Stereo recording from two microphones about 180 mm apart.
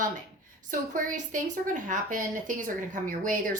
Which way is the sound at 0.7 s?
45° right (ahead or behind).